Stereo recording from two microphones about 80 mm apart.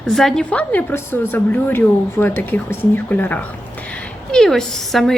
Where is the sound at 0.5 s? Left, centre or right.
Centre.